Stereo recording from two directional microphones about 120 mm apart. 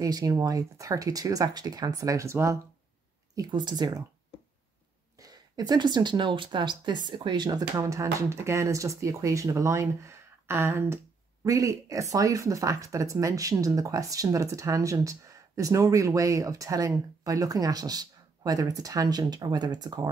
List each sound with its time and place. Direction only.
0.0 s speech: 30° right (ahead or behind)
3.3 s speech: 35° right (ahead or behind)
5.2 s speech: 35° right (ahead or behind)